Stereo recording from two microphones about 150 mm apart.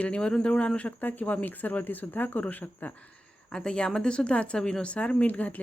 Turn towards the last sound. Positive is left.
turn(degrees=10)  # may be behind; listen again after turning